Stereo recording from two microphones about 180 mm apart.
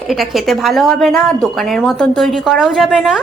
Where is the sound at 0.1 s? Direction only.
Centre (ahead or behind).